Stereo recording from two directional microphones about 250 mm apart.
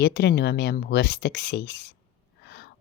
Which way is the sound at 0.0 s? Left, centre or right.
Left.